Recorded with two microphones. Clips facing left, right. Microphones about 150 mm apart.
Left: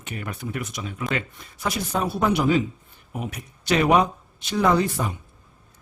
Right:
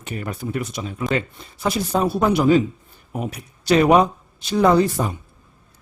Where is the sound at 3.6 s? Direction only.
35° right (ahead or behind).